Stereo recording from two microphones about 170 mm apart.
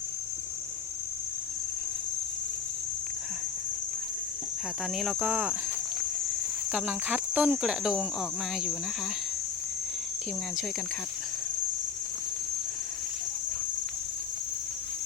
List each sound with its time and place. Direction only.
4.9 s cricket: 5° right (ahead or behind)
6.7 s cricket: 5° right (ahead or behind)